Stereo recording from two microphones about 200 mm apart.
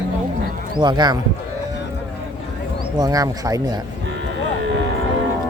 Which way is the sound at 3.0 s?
15° right (ahead or behind).